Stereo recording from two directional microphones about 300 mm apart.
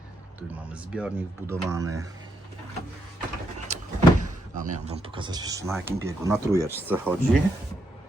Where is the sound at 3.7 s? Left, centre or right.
Right.